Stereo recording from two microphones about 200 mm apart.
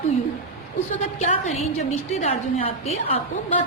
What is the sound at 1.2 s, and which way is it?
A woman's voice, 35° left (ahead or behind).